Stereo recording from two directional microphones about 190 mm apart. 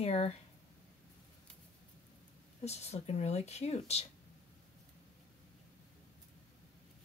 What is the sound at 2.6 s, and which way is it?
Speech, 35° left (ahead or behind).